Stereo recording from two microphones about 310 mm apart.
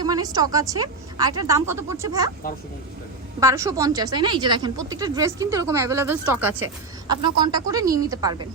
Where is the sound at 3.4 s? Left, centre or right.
Centre.